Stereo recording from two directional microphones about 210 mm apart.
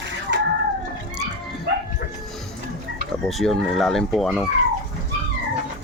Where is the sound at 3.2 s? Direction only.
Centre (ahead or behind).